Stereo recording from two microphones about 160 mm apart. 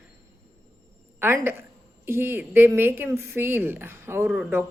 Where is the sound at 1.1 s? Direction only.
15° right (ahead or behind).